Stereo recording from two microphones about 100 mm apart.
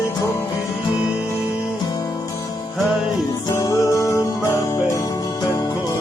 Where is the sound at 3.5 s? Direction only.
35° left (ahead or behind).